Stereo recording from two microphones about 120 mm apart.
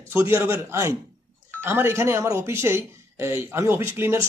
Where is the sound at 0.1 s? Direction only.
25° right (ahead or behind).